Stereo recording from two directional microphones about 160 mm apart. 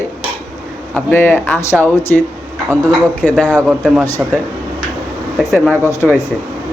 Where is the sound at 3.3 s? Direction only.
5° left (ahead or behind).